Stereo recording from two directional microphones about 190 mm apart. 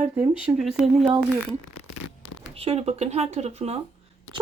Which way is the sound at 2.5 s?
30° right (ahead or behind).